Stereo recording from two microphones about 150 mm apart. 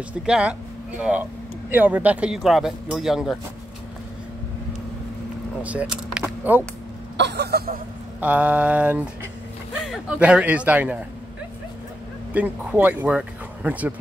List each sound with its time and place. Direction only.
0.2 s speech: 5° right (ahead or behind)
5.6 s speech: 10° right (ahead or behind)
7.3 s speech: 90° right
8.2 s speech: 10° right (ahead or behind)
12.3 s speech: 10° right (ahead or behind)